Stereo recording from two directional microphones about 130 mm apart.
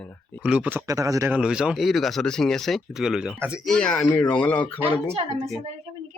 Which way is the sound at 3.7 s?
5° left (ahead or behind).